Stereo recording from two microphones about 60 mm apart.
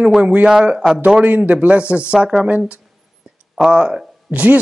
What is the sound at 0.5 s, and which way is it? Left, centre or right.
Speech, centre.